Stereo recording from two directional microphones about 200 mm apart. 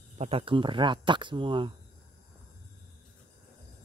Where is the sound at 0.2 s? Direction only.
30° right (ahead or behind).